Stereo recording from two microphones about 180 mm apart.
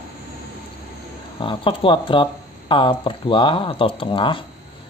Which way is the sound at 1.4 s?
30° left (ahead or behind).